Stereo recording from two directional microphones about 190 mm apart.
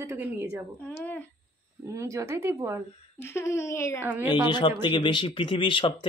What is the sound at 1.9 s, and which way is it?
Speech, 15° right (ahead or behind).